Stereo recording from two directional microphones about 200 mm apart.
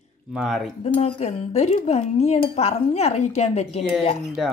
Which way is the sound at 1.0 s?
30° left (ahead or behind).